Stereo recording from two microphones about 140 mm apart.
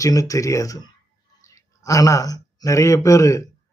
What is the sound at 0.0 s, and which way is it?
A man's voice, 25° left (ahead or behind).